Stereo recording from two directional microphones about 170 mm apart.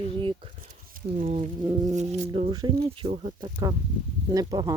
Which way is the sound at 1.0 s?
55° right (ahead or behind).